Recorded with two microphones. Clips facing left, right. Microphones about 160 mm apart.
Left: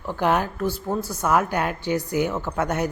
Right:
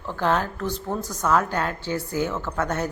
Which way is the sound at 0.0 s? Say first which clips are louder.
Left 2 dB; 15° left (ahead or behind).